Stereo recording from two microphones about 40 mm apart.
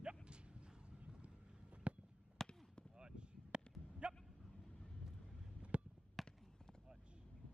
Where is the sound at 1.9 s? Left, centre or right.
Right.